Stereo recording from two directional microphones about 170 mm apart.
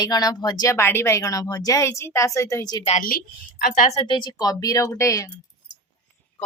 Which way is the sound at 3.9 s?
25° left (ahead or behind).